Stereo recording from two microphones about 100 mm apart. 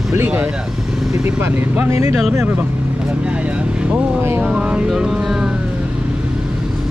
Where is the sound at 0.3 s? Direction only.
15° right (ahead or behind).